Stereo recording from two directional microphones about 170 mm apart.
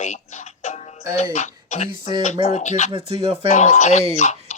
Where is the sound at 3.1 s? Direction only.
35° right (ahead or behind).